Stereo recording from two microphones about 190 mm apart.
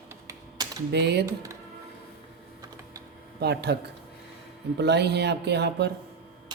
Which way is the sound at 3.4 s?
60° right (ahead or behind).